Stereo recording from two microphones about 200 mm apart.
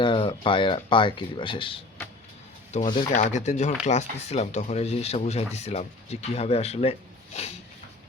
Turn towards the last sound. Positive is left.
turn(degrees=35)  # may be behind; listen again after turning